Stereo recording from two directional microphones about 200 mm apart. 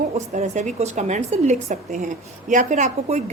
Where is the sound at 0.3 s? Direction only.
35° right (ahead or behind).